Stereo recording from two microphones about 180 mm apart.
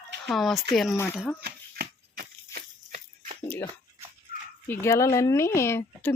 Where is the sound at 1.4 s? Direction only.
60° right (ahead or behind).